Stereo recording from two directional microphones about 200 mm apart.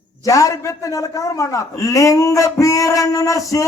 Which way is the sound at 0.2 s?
15° left (ahead or behind).